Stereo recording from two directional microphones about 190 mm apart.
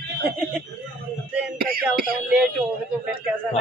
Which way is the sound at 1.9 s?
5° right (ahead or behind).